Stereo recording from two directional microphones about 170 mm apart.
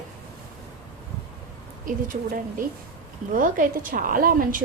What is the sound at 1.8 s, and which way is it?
A woman's voice, 55° right (ahead or behind).